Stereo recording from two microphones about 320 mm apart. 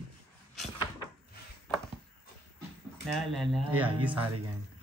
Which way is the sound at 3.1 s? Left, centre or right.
Centre.